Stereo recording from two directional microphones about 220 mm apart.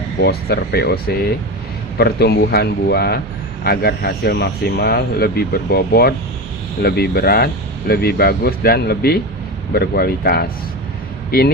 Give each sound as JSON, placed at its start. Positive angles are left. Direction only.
{"t": 0.2, "sound": "speech", "side_deg": 45}